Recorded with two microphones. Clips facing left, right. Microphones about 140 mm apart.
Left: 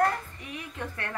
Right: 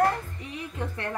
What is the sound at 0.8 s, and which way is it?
Speech, 20° right (ahead or behind).